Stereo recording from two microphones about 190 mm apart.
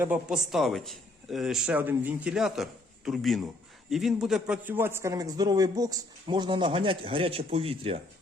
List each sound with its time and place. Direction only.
0.0 s a man's voice: 5° right (ahead or behind); by 8.0 s 30° right (ahead or behind)